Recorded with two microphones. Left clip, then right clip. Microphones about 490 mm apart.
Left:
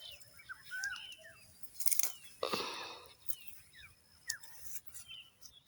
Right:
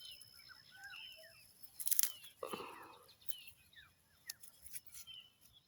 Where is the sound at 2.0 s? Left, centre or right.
Right.